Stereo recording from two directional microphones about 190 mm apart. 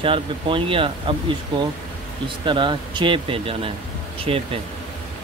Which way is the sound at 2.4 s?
25° right (ahead or behind).